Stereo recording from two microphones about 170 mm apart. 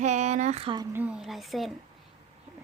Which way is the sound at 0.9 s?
5° right (ahead or behind).